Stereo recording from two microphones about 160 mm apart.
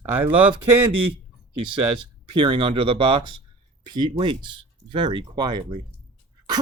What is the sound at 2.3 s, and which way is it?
Speech, 30° right (ahead or behind).